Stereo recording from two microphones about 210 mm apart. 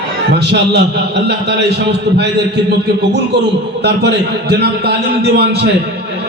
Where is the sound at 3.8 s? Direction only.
50° right (ahead or behind).